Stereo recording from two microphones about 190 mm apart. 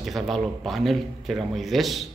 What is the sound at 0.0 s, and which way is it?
Speech, centre (ahead or behind).